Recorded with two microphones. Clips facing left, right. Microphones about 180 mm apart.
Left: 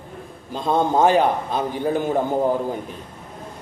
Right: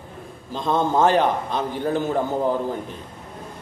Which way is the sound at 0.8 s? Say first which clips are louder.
Left 1 dB; 15° left (ahead or behind).